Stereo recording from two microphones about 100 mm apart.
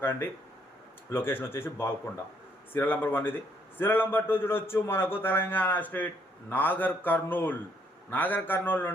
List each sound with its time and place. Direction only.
0.0 s a man's voice: 20° left (ahead or behind)